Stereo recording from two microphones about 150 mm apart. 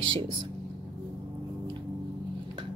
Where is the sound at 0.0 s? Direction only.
35° right (ahead or behind).